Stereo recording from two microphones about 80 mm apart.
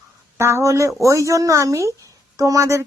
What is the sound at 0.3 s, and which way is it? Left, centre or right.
Speech, right.